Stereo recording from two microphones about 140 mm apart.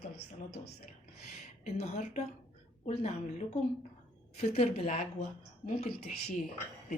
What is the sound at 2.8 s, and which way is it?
A woman's voice, 50° left (ahead or behind).